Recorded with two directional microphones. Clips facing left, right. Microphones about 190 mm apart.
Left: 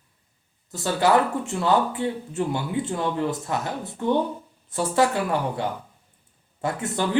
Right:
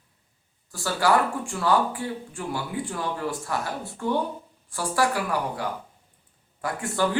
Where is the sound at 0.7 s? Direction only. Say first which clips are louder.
Left 2 dB; 20° left (ahead or behind).